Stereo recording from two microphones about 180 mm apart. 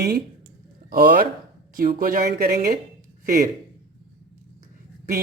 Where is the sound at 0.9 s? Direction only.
55° right (ahead or behind).